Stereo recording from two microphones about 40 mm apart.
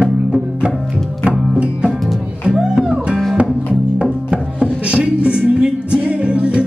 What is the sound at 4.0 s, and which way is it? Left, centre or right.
Music, right.